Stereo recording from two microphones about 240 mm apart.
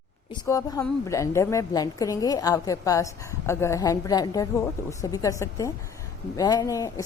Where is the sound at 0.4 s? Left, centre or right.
Centre.